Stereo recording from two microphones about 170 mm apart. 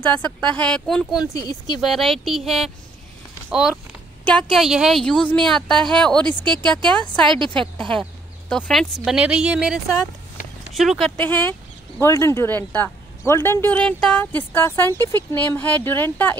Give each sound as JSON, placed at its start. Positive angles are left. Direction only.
{"t": 0.0, "sound": "a woman's voice", "side_deg": 10}
{"t": 6.2, "sound": "speech", "side_deg": -25}
{"t": 7.9, "sound": "a woman's voice", "side_deg": 5}